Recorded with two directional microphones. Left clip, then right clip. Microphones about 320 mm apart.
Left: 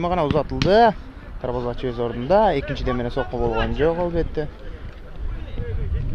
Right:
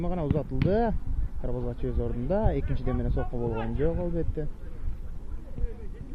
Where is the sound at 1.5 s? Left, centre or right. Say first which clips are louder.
Left 9 dB; centre.